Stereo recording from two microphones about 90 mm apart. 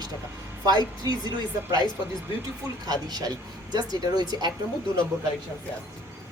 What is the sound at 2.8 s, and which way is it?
Speech, 50° right (ahead or behind).